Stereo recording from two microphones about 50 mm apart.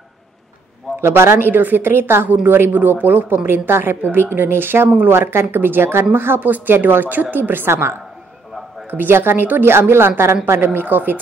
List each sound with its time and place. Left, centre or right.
1.0 s a woman's voice: right
8.9 s a woman's voice: right